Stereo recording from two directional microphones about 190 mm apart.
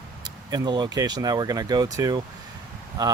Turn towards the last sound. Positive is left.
turn(degrees=-20)  # may be behind; listen again after turning